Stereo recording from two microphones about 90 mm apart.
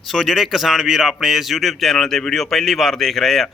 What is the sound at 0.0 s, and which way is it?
A man's voice, centre (ahead or behind).